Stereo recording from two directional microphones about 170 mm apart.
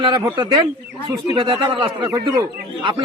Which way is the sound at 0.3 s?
25° right (ahead or behind).